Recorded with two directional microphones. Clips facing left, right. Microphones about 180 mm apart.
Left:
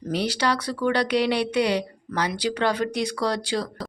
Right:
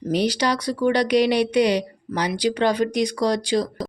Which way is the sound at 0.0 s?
15° right (ahead or behind).